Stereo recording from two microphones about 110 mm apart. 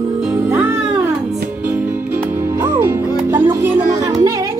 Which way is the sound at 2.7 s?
25° right (ahead or behind).